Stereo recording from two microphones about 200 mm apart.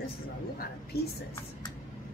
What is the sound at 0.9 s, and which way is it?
Speech, 50° left (ahead or behind).